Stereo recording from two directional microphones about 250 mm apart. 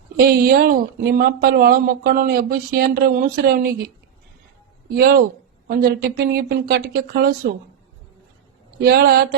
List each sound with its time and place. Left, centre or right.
0.2 s speech: right
4.9 s speech: right
8.8 s speech: right